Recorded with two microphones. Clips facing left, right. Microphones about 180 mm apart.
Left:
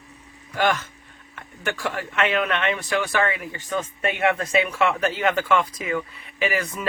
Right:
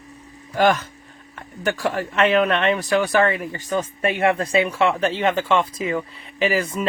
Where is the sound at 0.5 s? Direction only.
35° right (ahead or behind).